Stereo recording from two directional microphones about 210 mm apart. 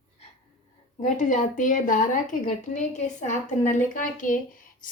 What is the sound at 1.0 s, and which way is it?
A woman's voice, 35° left (ahead or behind).